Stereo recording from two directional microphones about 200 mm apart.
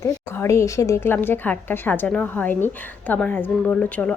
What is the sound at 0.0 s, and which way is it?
A woman's voice, 15° left (ahead or behind).